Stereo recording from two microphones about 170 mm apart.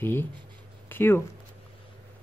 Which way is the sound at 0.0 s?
10° left (ahead or behind).